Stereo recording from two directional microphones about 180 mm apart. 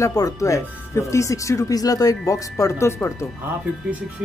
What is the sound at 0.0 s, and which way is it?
Speech, 20° left (ahead or behind).